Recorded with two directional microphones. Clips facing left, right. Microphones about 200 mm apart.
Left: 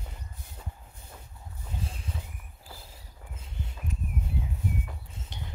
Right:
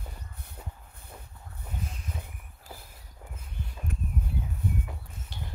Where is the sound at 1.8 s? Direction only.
30° left (ahead or behind).